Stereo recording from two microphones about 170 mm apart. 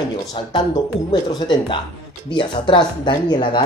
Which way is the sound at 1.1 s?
25° left (ahead or behind).